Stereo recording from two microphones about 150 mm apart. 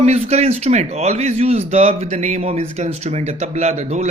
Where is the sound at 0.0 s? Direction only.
45° right (ahead or behind).